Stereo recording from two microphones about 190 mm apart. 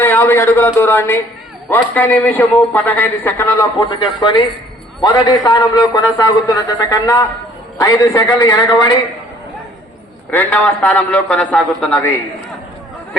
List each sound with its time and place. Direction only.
0.0 s a man's voice: 10° left (ahead or behind)
3.8 s a man's voice: 20° left (ahead or behind)
10.3 s a man's voice: 5° left (ahead or behind)